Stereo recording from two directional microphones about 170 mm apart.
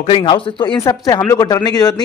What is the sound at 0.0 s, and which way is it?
A man's voice, 30° left (ahead or behind).